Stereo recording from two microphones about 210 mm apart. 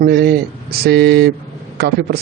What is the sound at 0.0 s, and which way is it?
A man's voice, 50° right (ahead or behind).